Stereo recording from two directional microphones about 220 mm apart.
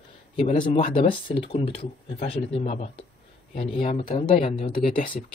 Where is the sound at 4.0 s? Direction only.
40° left (ahead or behind).